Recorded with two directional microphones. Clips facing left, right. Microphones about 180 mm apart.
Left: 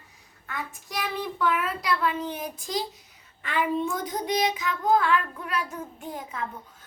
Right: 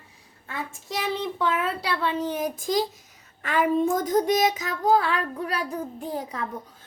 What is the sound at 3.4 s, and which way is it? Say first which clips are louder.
A child's voice: right 5 dB; 45° right (ahead or behind).